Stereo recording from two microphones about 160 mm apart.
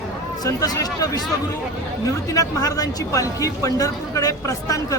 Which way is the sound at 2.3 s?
20° left (ahead or behind).